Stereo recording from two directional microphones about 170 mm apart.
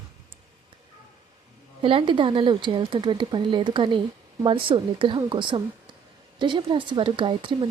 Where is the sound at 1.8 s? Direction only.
30° right (ahead or behind).